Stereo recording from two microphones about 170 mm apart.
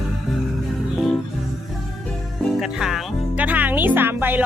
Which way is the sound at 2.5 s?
Centre (ahead or behind).